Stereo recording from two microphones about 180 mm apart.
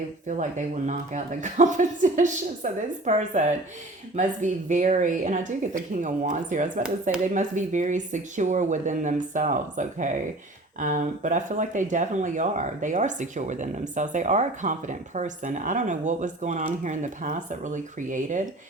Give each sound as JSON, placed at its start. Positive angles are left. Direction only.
{"t": 0.3, "sound": "speech", "side_deg": -40}